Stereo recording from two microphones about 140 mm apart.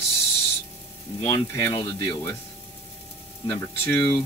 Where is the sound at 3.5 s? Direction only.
15° left (ahead or behind).